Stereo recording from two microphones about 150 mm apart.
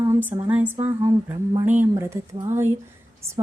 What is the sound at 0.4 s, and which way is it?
Speech, 10° right (ahead or behind).